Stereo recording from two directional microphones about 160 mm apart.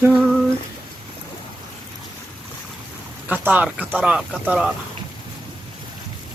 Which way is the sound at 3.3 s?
10° right (ahead or behind).